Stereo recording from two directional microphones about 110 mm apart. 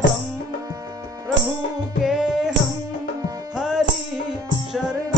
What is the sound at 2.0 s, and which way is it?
Music, 5° right (ahead or behind).